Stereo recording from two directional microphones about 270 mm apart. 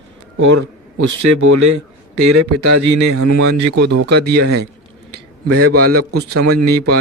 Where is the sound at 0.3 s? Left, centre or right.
Right.